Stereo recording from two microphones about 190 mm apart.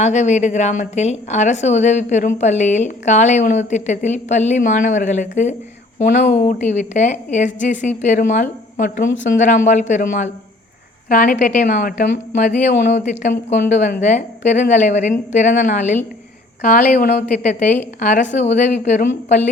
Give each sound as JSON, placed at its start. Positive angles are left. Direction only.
{"t": 0.0, "sound": "a woman's voice", "side_deg": 40}
{"t": 12.8, "sound": "speech", "side_deg": 60}
{"t": 13.5, "sound": "a woman's voice", "side_deg": 40}